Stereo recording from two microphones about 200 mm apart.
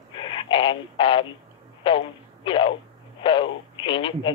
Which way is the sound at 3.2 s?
25° left (ahead or behind).